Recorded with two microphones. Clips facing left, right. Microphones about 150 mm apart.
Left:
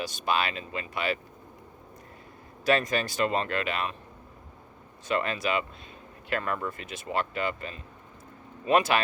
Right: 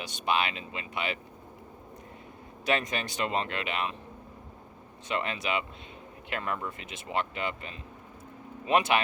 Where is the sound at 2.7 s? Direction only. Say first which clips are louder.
Left 4 dB; 20° right (ahead or behind).